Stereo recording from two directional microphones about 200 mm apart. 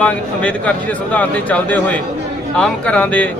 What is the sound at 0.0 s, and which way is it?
Speech, 5° left (ahead or behind).